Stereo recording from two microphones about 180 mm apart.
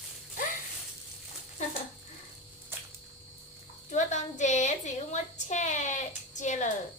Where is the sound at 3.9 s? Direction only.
40° left (ahead or behind).